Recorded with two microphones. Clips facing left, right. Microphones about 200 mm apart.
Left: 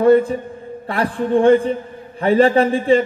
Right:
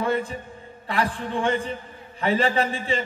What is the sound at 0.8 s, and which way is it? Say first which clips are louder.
A man's voice: left 6 dB; 55° left (ahead or behind).